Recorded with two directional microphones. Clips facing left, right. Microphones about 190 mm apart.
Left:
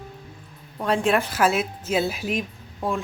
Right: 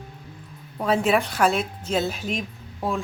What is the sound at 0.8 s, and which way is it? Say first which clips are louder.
A woman's voice: right 1 dB; 5° right (ahead or behind).